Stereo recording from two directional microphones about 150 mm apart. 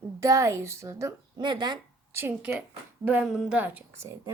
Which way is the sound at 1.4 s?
30° right (ahead or behind).